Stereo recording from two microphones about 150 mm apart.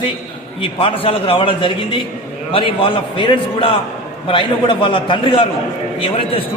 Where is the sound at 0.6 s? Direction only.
35° left (ahead or behind).